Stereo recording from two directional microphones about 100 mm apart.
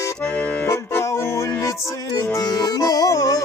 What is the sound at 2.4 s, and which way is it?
Accordion, 40° left (ahead or behind).